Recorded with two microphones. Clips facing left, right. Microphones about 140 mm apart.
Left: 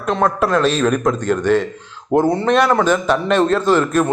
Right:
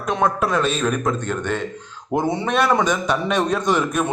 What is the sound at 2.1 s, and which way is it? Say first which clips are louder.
A man's voice: left 6 dB; centre (ahead or behind).